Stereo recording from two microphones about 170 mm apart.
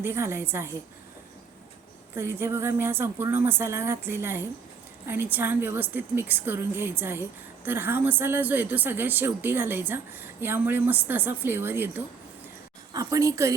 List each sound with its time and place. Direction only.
0.0 s a woman's voice: 15° right (ahead or behind)
2.1 s a woman's voice: 15° right (ahead or behind)